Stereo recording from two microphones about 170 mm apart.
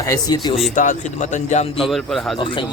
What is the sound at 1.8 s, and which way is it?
Speech, centre (ahead or behind).